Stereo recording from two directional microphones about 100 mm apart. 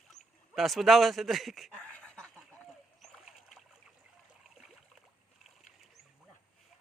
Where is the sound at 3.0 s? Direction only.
Centre (ahead or behind).